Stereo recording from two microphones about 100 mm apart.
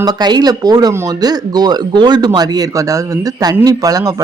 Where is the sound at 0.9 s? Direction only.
25° right (ahead or behind).